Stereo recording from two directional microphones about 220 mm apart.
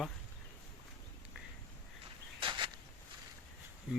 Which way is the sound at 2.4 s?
20° right (ahead or behind).